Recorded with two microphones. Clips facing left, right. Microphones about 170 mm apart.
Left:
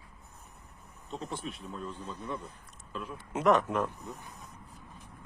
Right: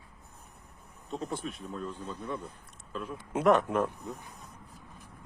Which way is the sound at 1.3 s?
50° right (ahead or behind).